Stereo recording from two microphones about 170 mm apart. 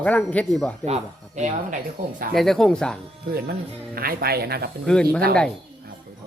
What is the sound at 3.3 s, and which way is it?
Speech, 65° right (ahead or behind).